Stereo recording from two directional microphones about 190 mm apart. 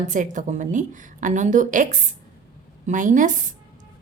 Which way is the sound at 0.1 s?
40° right (ahead or behind).